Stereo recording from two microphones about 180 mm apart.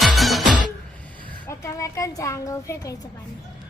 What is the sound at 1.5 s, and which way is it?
A woman's voice, 15° left (ahead or behind).